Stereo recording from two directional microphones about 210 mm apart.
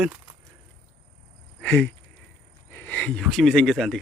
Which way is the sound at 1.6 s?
10° left (ahead or behind).